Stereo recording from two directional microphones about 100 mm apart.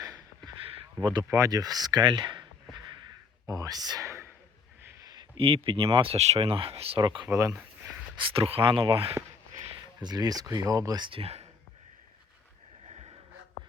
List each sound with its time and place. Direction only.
0.0 s a sound: 35° right (ahead or behind)
1.3 s speech: 35° right (ahead or behind); by 2.5 s 50° right (ahead or behind)
3.4 s speech: 35° right (ahead or behind)
4.9 s a sound: 40° right (ahead or behind)
5.4 s speech: 65° right (ahead or behind)
7.0 s speech: 50° right (ahead or behind)
8.3 s speech: 65° right (ahead or behind)
10.0 s speech: 40° right (ahead or behind)
11.1 s speech: 80° right
12.8 s a sound: 90° right